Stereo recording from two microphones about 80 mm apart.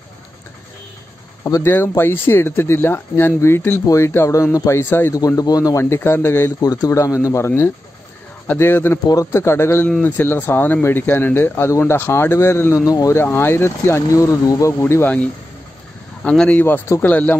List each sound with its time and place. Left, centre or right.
1.4 s speech: left
3.8 s speech: left
5.1 s speech: left
5.8 s speech: left
6.6 s speech: left
9.1 s speech: left
12.8 s speech: left
13.1 s speech: left
14.8 s speech: left
16.3 s speech: centre